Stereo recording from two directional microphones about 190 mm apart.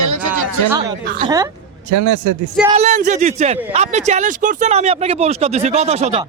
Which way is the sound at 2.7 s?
40° right (ahead or behind).